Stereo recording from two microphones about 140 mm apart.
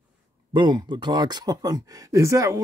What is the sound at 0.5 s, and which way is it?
Speech, 35° right (ahead or behind).